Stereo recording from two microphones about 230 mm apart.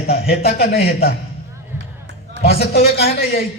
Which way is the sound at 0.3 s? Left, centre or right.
Left.